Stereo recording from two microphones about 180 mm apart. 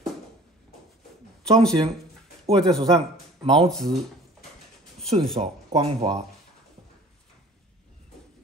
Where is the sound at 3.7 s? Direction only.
Centre (ahead or behind).